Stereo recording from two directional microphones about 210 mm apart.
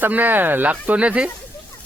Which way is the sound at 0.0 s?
10° right (ahead or behind).